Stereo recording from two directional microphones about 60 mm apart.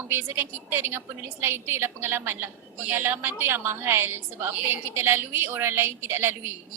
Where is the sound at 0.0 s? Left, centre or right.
Right.